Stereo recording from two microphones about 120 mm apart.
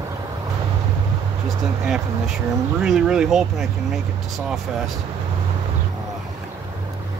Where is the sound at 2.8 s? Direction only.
5° right (ahead or behind).